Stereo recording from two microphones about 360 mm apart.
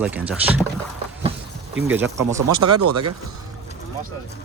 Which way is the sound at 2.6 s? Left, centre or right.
Right.